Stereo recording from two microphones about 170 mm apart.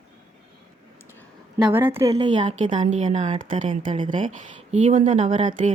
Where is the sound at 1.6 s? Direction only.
10° right (ahead or behind).